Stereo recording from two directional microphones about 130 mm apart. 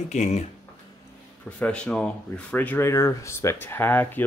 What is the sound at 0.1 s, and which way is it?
Speech, 60° left (ahead or behind).